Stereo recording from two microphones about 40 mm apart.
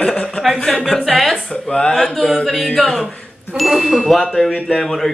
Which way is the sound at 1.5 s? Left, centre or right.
Left.